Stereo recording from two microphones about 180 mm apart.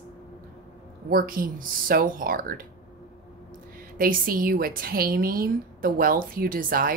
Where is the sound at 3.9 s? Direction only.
55° right (ahead or behind).